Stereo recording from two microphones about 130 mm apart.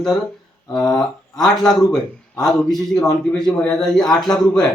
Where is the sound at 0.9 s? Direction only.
Centre (ahead or behind).